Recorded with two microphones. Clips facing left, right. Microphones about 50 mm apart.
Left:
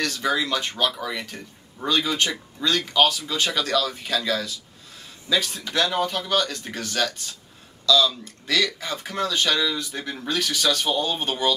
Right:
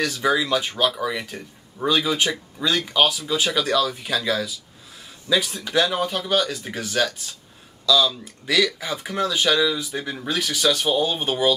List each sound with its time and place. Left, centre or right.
0.0 s speech: centre